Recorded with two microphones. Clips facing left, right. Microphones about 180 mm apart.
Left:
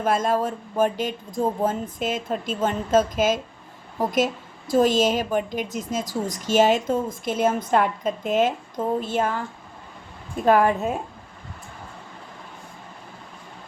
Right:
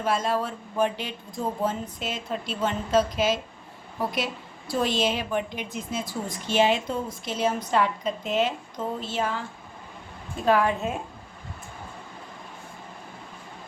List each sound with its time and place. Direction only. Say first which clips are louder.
0.0 s a woman's voice: left 4 dB; 50° left (ahead or behind)
10.4 s a woman's voice: left 4 dB; 45° left (ahead or behind)